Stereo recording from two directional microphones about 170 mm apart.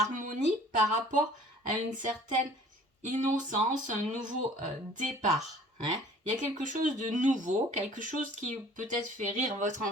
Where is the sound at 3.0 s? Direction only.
50° right (ahead or behind).